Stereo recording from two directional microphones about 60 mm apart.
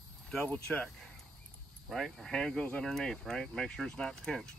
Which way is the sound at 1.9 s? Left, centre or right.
Centre.